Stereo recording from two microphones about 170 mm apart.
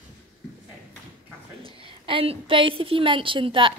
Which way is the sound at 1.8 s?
30° right (ahead or behind).